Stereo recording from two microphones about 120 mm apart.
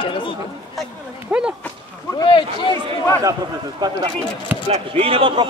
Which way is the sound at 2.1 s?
40° left (ahead or behind).